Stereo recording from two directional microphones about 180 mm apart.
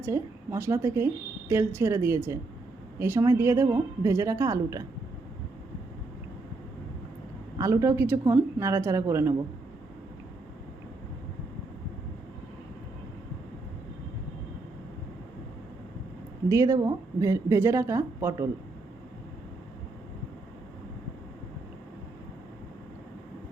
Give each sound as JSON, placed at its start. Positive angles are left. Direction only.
{"t": 0.0, "sound": "a woman's voice", "side_deg": -15}
{"t": 7.6, "sound": "a woman's voice", "side_deg": -15}
{"t": 16.5, "sound": "a woman's voice", "side_deg": -20}